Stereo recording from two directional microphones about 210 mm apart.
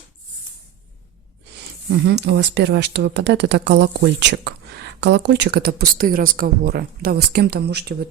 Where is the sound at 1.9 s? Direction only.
55° right (ahead or behind).